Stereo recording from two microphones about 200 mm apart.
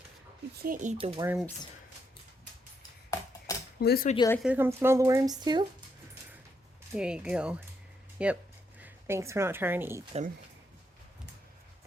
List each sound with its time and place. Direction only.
0.5 s speech: 45° right (ahead or behind)
0.9 s speech: 25° right (ahead or behind)
1.2 s speech: 10° right (ahead or behind)
3.1 s a sound: 15° left (ahead or behind)
3.8 s speech: 50° left (ahead or behind)
4.4 s speech: 10° right (ahead or behind)
6.9 s speech: 5° right (ahead or behind)